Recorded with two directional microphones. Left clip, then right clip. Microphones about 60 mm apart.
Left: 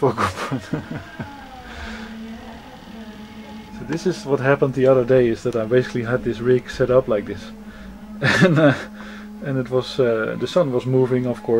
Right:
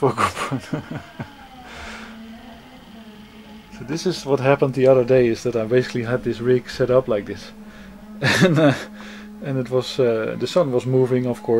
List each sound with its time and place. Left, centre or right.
0.0 s speech: right
0.5 s speech: right
3.9 s speech: right
10.9 s speech: right